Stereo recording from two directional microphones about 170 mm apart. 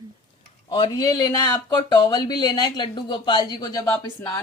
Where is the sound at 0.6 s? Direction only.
25° left (ahead or behind).